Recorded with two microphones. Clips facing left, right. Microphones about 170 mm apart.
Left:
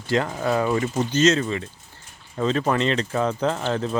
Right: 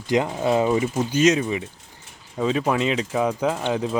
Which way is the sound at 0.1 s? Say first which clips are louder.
Right 2 dB; 15° right (ahead or behind).